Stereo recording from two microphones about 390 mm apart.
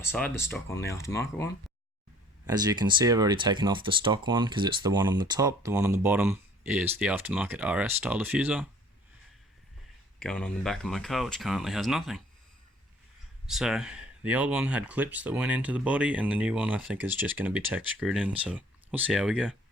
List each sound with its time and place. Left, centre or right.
0.0 s speech: centre
2.5 s speech: centre
10.2 s speech: centre
13.5 s speech: centre